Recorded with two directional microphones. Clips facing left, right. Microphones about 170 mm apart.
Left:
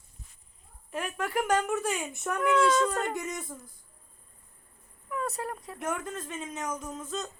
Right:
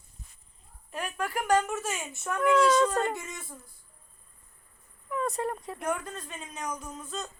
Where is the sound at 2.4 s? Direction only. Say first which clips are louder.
Right 2 dB; centre (ahead or behind).